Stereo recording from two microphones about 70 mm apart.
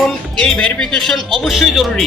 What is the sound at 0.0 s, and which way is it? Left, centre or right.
Speech, centre.